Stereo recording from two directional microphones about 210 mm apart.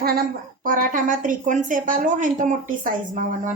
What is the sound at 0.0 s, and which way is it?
A woman's voice, 45° right (ahead or behind).